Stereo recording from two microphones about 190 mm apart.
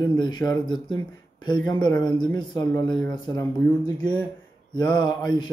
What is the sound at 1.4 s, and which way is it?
Speech, 25° left (ahead or behind).